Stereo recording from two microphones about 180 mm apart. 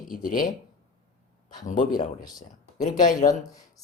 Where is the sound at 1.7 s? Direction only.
45° left (ahead or behind).